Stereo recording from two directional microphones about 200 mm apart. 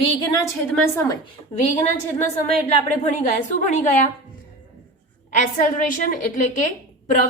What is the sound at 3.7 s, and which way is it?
Speech, 40° left (ahead or behind).